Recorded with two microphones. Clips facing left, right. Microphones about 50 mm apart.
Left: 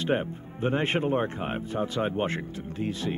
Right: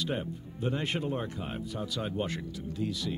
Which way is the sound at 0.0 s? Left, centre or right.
Left.